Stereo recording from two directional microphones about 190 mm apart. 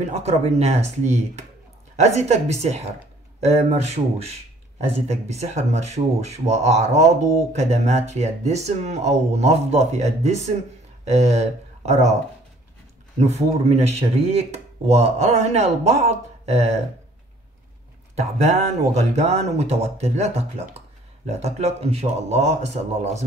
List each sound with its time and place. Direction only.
0.0 s speech: 35° right (ahead or behind)
13.2 s speech: 35° right (ahead or behind)
18.1 s speech: 35° right (ahead or behind)